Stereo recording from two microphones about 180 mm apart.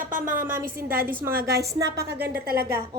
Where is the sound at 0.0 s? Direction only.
50° right (ahead or behind).